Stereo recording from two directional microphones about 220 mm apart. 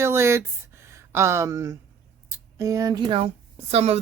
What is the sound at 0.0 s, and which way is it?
Speech, 10° right (ahead or behind).